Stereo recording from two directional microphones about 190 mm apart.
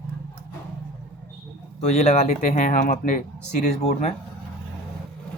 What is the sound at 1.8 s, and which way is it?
Speech, 35° left (ahead or behind).